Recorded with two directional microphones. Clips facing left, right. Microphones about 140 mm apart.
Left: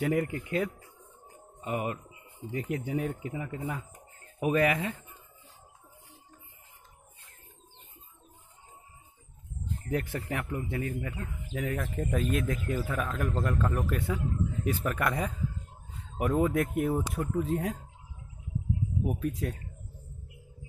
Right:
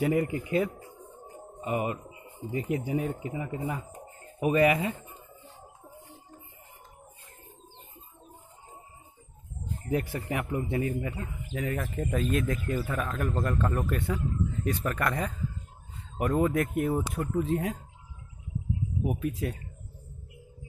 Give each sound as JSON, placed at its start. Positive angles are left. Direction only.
{"t": 0.0, "sound": "speech", "side_deg": -10}
{"t": 0.7, "sound": "music", "side_deg": -40}
{"t": 1.6, "sound": "speech", "side_deg": -5}
{"t": 9.7, "sound": "speech", "side_deg": -5}
{"t": 11.2, "sound": "speech", "side_deg": 0}
{"t": 19.0, "sound": "speech", "side_deg": -5}